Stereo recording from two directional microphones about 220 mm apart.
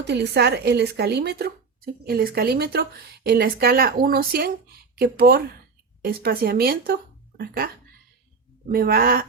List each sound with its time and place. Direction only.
0.0 s speech: 50° right (ahead or behind)